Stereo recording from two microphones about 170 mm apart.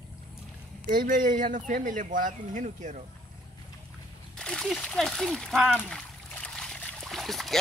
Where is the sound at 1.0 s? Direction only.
50° right (ahead or behind).